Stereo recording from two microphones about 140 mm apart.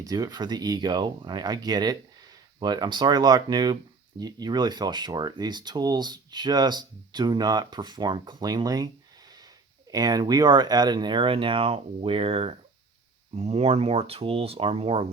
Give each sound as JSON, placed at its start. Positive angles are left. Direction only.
{"t": 0.0, "sound": "speech", "side_deg": -25}
{"t": 9.9, "sound": "speech", "side_deg": -30}